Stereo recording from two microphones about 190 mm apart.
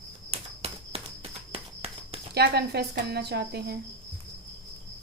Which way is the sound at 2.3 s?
60° right (ahead or behind).